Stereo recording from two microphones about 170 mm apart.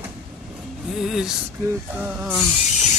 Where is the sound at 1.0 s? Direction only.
5° right (ahead or behind).